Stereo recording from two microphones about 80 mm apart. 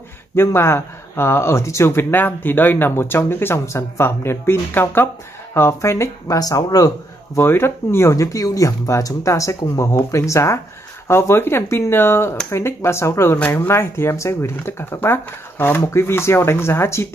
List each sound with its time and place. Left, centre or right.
0.4 s speech: left
6.2 s speech: left
7.3 s speech: left